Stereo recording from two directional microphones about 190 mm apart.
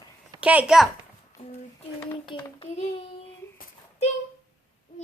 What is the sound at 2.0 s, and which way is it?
Child singing, 25° left (ahead or behind).